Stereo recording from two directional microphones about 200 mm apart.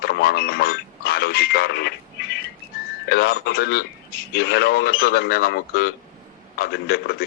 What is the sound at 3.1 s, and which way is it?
Speech, 55° left (ahead or behind).